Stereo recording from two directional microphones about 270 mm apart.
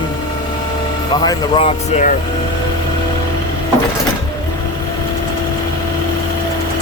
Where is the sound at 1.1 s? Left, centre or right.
Centre.